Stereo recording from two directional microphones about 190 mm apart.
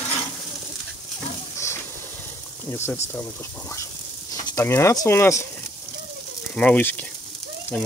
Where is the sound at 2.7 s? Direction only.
10° left (ahead or behind).